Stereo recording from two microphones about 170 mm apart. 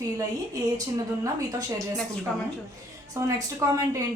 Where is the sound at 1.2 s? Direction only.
20° right (ahead or behind).